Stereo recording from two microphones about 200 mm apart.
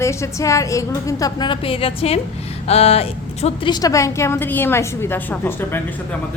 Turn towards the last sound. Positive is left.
turn(degrees=10)  # may be behind; listen again after turning